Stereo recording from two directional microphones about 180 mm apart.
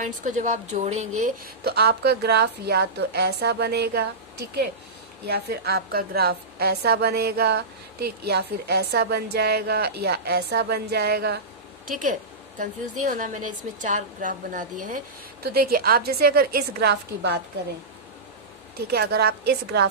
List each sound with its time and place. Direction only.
0.0 s a woman's voice: 45° right (ahead or behind)
1.6 s a woman's voice: 60° right (ahead or behind)
5.2 s a woman's voice: 60° right (ahead or behind)
11.9 s a woman's voice: 50° right (ahead or behind)
15.4 s a woman's voice: 55° right (ahead or behind)
18.9 s a woman's voice: 60° right (ahead or behind)